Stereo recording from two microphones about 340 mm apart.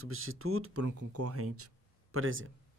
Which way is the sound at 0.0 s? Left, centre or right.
Right.